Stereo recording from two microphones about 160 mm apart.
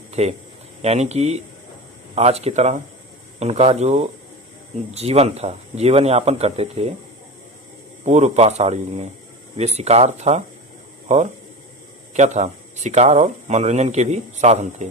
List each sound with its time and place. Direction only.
0.1 s a man's voice: 45° right (ahead or behind)
8.0 s speech: 45° right (ahead or behind)